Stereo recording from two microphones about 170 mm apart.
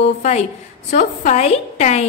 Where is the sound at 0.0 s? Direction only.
40° left (ahead or behind).